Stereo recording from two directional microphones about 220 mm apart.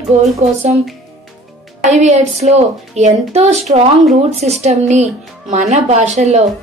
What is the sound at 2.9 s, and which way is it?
Speech, 30° right (ahead or behind).